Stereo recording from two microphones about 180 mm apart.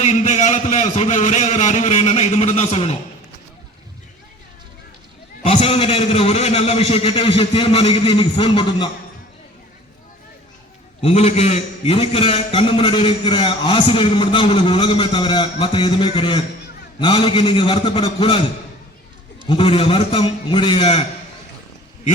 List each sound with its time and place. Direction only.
0.0 s a man's voice: 40° left (ahead or behind)
5.4 s a man's voice: 35° left (ahead or behind)
11.0 s a man's voice: 35° left (ahead or behind)
19.5 s a man's voice: 30° left (ahead or behind)